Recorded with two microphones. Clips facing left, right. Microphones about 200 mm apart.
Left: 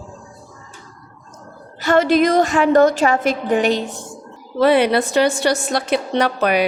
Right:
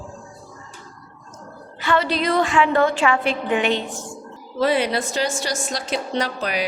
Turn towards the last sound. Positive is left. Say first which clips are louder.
# left 7 dB
turn(degrees=60)  # may be behind; listen again after turning